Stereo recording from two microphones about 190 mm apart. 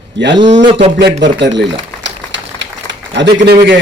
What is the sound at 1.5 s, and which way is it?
Speech, 70° right (ahead or behind).